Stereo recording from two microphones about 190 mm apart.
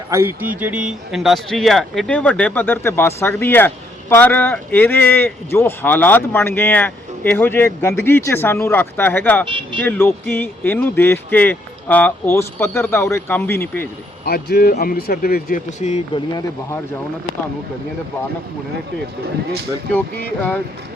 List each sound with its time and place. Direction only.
0.1 s speech: 15° right (ahead or behind); by 13.8 s 10° left (ahead or behind)
14.3 s speech: 55° left (ahead or behind); by 16.2 s 35° left (ahead or behind)
19.9 s speech: 10° left (ahead or behind)